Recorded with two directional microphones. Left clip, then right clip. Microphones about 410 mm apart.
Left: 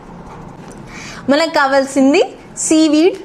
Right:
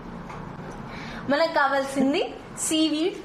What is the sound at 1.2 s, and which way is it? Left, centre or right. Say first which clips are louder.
Speech: left 9 dB; left.